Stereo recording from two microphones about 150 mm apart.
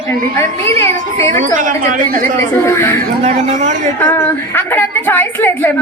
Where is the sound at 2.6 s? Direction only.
15° left (ahead or behind).